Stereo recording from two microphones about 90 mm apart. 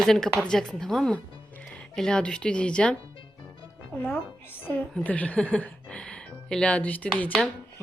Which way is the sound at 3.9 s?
20° left (ahead or behind).